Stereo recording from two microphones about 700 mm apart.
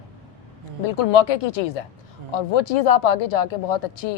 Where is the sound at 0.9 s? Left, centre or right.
Left.